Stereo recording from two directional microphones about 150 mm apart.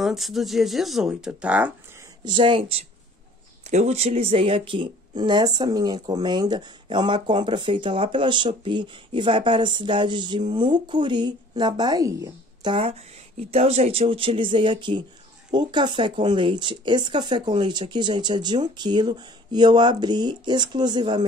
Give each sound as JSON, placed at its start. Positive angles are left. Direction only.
{"t": 0.0, "sound": "speech", "side_deg": 0}
{"t": 2.2, "sound": "speech", "side_deg": -30}
{"t": 3.6, "sound": "speech", "side_deg": -45}
{"t": 13.4, "sound": "speech", "side_deg": -40}